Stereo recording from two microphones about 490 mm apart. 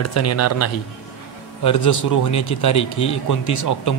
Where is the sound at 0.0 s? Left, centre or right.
Left.